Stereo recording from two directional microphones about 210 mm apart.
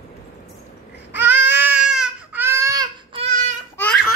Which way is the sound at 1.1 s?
10° right (ahead or behind).